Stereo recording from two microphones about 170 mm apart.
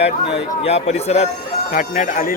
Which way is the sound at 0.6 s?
40° left (ahead or behind).